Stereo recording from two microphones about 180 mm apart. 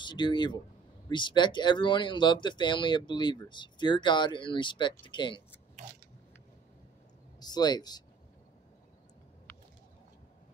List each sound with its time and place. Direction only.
0.0 s speech: 25° left (ahead or behind)
7.3 s speech: 20° left (ahead or behind)
9.5 s a sound: 15° left (ahead or behind)